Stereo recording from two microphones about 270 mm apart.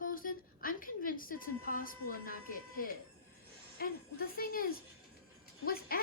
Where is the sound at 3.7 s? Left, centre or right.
Left.